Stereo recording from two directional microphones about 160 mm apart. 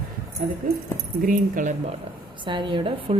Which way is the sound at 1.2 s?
55° right (ahead or behind).